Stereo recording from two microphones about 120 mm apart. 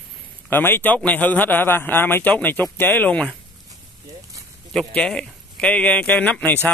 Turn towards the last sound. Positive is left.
turn(degrees=10)  # may be behind; listen again after turning